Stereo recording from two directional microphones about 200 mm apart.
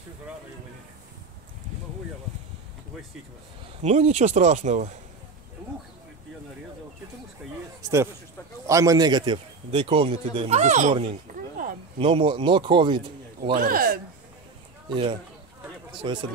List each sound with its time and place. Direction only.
3.8 s speech: 35° right (ahead or behind)
7.8 s a man's voice: 15° right (ahead or behind); by 11.1 s 35° right (ahead or behind)
11.3 s a sound: 40° right (ahead or behind)
12.0 s a man's voice: 25° right (ahead or behind)
13.4 s speech: 45° right (ahead or behind)
14.9 s a man's voice: 25° right (ahead or behind)